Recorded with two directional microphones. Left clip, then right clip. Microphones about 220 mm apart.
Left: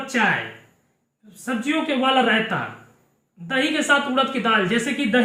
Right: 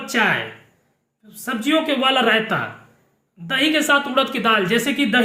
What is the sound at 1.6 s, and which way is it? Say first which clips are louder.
Speech: right 3 dB; 50° right (ahead or behind).